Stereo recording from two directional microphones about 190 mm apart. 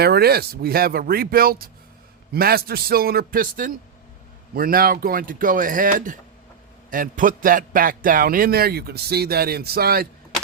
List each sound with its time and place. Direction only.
0.0 s a man's voice: 55° right (ahead or behind)